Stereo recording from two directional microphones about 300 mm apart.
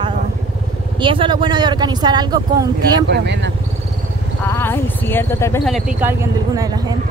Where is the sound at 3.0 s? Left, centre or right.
Right.